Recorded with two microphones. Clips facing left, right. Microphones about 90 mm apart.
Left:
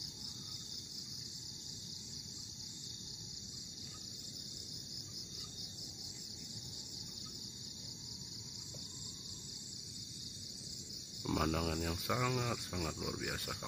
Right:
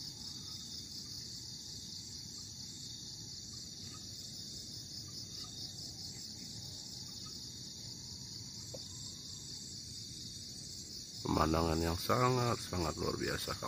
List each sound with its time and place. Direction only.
11.2 s speech: 30° right (ahead or behind)